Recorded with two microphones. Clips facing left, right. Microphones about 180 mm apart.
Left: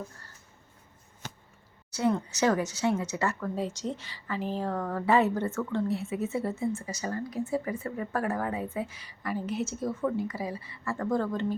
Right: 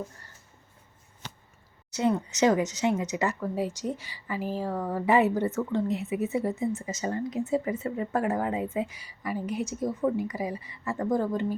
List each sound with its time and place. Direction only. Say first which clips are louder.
1.9 s speech: right 1 dB; 20° right (ahead or behind)